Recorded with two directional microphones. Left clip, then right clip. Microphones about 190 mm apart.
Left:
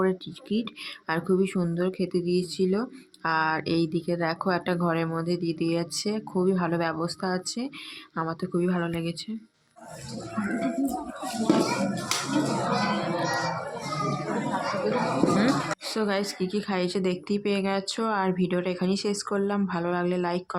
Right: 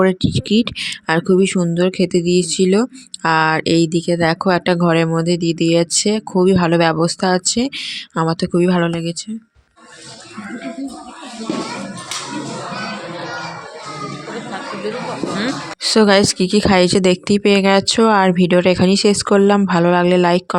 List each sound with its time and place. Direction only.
0.0 s speech: 40° right (ahead or behind)
15.8 s speech: 45° right (ahead or behind)